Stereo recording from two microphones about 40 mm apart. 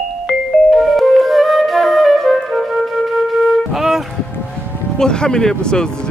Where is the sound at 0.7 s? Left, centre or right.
Centre.